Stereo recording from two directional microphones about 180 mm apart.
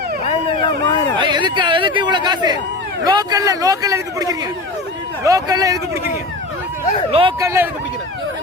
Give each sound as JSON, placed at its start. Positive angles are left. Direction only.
{"t": 0.3, "sound": "a sound", "side_deg": 25}
{"t": 1.2, "sound": "speech", "side_deg": -25}
{"t": 7.1, "sound": "speech", "side_deg": -30}
{"t": 7.3, "sound": "speech", "side_deg": -15}